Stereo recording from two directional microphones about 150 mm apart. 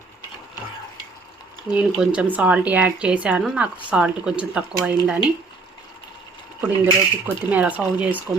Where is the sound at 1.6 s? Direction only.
5° right (ahead or behind).